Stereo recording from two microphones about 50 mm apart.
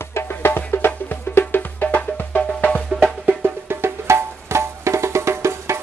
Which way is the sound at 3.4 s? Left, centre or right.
Right.